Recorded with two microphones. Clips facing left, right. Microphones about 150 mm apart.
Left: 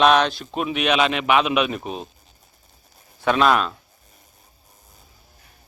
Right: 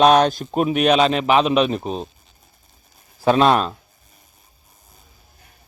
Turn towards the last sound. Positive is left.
turn(degrees=-35)  # may be behind; listen again after turning